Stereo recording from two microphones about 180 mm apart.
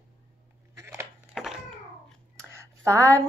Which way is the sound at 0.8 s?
15° right (ahead or behind).